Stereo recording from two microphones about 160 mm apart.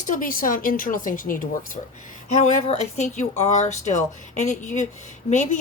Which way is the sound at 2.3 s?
45° left (ahead or behind).